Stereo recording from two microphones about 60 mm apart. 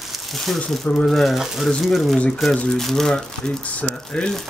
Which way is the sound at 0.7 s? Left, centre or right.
Centre.